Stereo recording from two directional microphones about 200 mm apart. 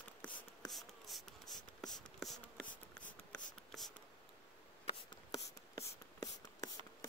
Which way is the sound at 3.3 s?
Centre (ahead or behind).